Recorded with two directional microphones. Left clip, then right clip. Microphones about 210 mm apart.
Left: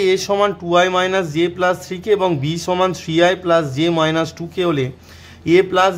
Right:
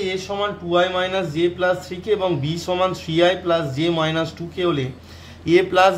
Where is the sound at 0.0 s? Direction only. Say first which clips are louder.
Left 8 dB; 40° left (ahead or behind).